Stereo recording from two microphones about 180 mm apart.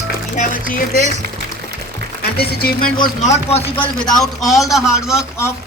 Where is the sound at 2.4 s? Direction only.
55° left (ahead or behind).